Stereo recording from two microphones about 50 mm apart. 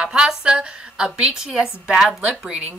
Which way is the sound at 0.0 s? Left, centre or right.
Centre.